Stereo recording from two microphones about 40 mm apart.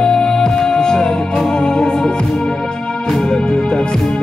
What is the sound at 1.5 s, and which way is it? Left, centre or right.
Organ, centre.